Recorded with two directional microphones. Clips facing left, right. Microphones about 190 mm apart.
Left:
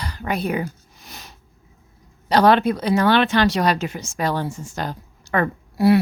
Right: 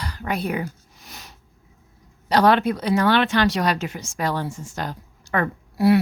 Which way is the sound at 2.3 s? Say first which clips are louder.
Left 2 dB; 30° left (ahead or behind).